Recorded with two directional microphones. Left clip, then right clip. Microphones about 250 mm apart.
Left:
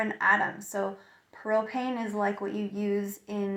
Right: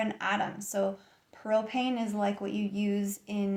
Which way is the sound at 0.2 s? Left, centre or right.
Right.